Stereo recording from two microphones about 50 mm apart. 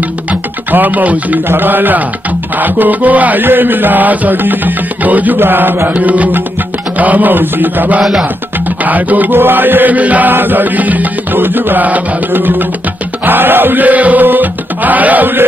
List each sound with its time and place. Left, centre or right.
0.3 s music: right
1.5 s music: right
5.4 s mantra: right
5.9 s music: right
8.0 s music: centre
8.8 s music: right